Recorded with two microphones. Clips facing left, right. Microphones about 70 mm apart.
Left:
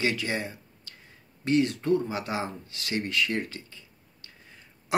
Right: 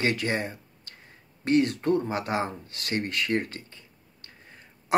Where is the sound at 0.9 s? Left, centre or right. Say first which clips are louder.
Right 1 dB; right.